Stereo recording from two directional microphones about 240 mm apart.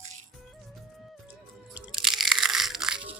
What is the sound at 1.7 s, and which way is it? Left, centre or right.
Crunch, centre.